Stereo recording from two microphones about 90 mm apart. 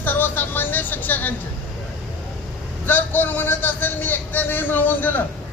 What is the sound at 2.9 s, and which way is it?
A man's voice, 20° left (ahead or behind).